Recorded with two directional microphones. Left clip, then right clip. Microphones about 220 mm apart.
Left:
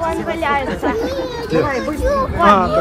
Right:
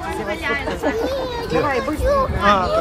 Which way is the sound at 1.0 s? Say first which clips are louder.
Left 1 dB; 30° right (ahead or behind).